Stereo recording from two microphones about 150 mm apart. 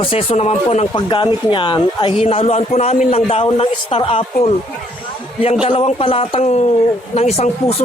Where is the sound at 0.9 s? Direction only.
30° left (ahead or behind).